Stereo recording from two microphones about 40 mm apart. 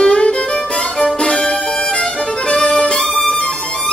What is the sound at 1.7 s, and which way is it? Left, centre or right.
Violin, left.